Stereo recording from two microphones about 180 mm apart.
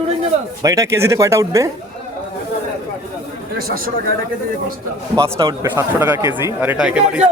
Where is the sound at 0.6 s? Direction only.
20° right (ahead or behind).